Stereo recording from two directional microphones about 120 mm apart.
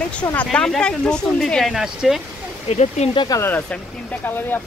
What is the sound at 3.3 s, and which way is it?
Speech, 20° left (ahead or behind).